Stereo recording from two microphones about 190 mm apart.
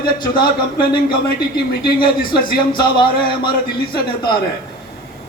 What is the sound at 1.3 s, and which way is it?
Speech, 55° left (ahead or behind).